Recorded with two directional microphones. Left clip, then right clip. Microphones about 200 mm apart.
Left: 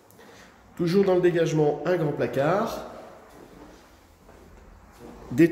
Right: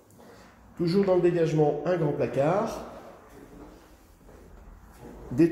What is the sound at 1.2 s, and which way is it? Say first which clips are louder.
Speech: left 1 dB; 25° left (ahead or behind).